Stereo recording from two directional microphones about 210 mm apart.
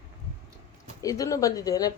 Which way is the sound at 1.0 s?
15° left (ahead or behind).